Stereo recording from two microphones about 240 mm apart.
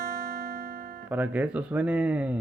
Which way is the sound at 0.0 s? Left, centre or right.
Right.